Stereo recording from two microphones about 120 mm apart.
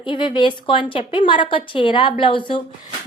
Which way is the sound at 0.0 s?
45° left (ahead or behind).